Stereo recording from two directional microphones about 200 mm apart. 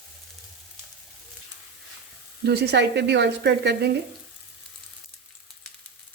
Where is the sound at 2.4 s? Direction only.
55° right (ahead or behind).